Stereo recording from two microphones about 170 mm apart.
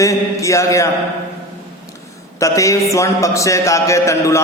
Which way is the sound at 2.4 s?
20° left (ahead or behind).